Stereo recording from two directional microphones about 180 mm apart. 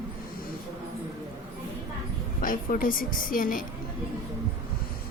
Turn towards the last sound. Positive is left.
turn(degrees=50)  # may be behind; listen again after turning